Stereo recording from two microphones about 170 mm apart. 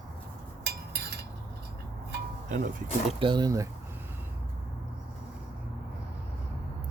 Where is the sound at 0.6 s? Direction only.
75° right (ahead or behind).